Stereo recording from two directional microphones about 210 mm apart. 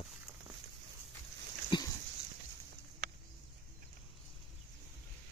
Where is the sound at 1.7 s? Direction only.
20° left (ahead or behind).